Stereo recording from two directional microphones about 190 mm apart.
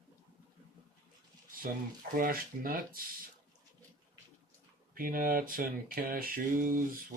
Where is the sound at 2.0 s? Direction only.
45° right (ahead or behind).